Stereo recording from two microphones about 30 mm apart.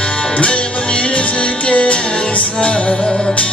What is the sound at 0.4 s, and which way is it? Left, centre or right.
Music, left.